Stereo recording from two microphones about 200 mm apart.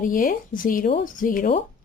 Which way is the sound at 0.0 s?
45° left (ahead or behind).